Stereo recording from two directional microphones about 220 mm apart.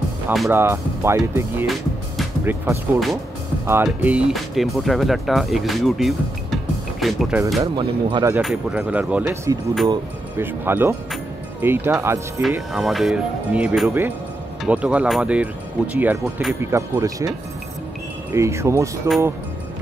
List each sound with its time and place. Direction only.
0.3 s speech: centre (ahead or behind)
0.6 s speech: 10° right (ahead or behind)
1.7 s music: 5° right (ahead or behind)
3.6 s speech: 10° right (ahead or behind)
7.6 s speech: 20° right (ahead or behind)
8.4 s speech: centre (ahead or behind)
12.7 s speech: centre (ahead or behind)
18.3 s speech: 10° right (ahead or behind)